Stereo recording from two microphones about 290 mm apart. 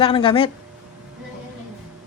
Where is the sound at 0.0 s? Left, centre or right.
Centre.